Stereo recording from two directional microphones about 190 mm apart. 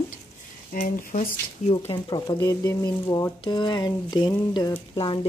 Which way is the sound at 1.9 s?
25° left (ahead or behind).